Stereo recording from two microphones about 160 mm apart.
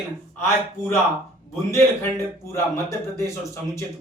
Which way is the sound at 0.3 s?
15° left (ahead or behind).